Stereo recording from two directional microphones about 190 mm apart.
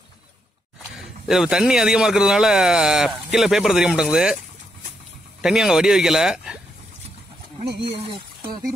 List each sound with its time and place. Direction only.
0.9 s speech: 5° right (ahead or behind)
5.4 s speech: centre (ahead or behind)
7.8 s speech: 30° right (ahead or behind)